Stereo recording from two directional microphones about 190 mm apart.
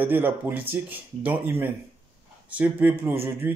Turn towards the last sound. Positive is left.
turn(degrees=-10)  # may be behind; listen again after turning